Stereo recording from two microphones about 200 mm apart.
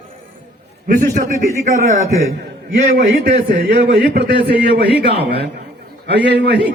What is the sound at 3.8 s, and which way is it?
A man's voice, 55° right (ahead or behind).